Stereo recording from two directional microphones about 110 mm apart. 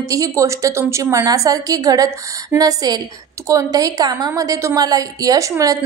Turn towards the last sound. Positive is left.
turn(degrees=-30)  # may be behind; listen again after turning